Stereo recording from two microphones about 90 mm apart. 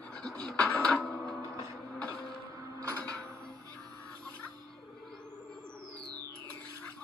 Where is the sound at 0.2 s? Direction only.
10° left (ahead or behind).